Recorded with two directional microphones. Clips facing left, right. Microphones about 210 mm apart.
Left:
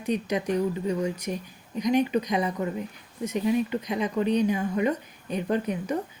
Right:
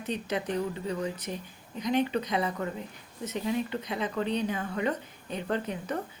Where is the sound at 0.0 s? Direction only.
15° left (ahead or behind).